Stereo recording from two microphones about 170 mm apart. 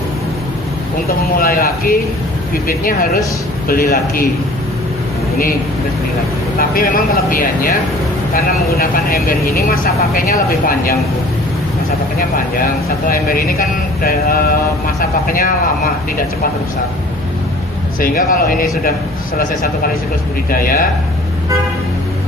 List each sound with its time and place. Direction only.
1.0 s speech: 60° left (ahead or behind)
6.6 s speech: 55° left (ahead or behind)
8.8 s speech: 60° left (ahead or behind)
13.1 s speech: 55° left (ahead or behind)
18.0 s speech: 55° left (ahead or behind)
20.5 s speech: 55° left (ahead or behind)